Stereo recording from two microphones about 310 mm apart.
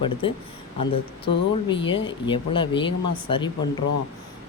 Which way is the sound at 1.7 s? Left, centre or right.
Centre.